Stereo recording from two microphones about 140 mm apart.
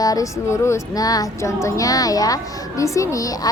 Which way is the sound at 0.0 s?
25° left (ahead or behind).